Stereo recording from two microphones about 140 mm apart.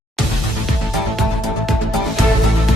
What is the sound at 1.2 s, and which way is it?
Music, centre (ahead or behind).